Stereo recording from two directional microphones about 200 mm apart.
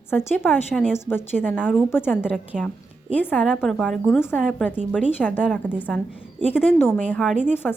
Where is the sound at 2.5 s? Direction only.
5° right (ahead or behind).